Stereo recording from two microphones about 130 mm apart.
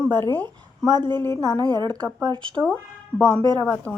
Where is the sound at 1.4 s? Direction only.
30° right (ahead or behind).